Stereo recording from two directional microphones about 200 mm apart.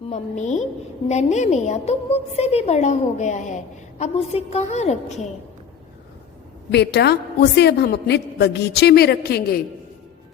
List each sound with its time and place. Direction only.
0.1 s a woman's voice: 35° left (ahead or behind)
6.7 s a woman's voice: 55° left (ahead or behind)